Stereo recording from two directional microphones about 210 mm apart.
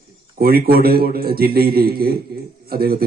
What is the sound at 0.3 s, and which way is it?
A man's voice, 45° right (ahead or behind).